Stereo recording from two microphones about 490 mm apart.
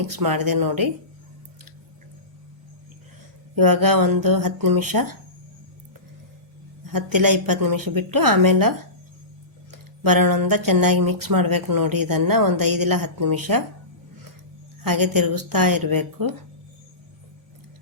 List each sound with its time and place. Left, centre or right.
0.2 s speech: right
3.5 s speech: right
6.9 s speech: right
10.0 s speech: right
14.8 s speech: right